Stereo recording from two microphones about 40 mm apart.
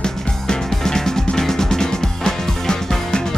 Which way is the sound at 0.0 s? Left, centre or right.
Centre.